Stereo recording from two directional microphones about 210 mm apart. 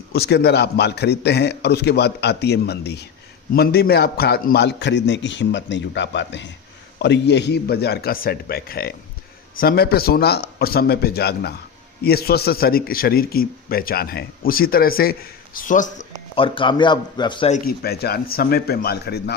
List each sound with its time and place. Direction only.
0.1 s a man's voice: 50° left (ahead or behind)
16.3 s speech: 25° left (ahead or behind)
17.5 s speech: 45° left (ahead or behind)